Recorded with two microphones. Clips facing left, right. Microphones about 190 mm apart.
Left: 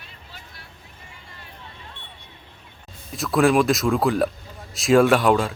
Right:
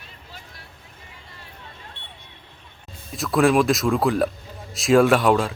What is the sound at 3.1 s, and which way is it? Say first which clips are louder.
Speech: even; centre (ahead or behind).